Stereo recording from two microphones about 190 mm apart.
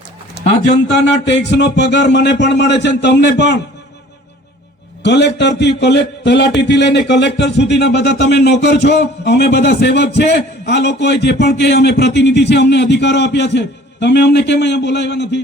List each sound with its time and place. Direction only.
0.4 s a sound: 60° right (ahead or behind)
1.3 s a man's voice: 65° left (ahead or behind)
5.0 s a man's voice: 65° left (ahead or behind)